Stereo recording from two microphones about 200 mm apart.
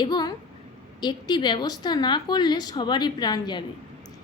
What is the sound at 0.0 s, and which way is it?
A woman's voice, 20° left (ahead or behind).